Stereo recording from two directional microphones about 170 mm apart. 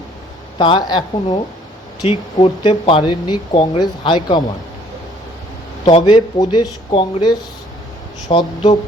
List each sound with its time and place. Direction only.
0.6 s speech: 25° left (ahead or behind)
5.8 s speech: 30° left (ahead or behind)